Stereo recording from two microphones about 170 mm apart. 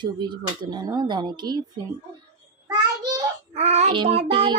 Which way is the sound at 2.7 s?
25° right (ahead or behind).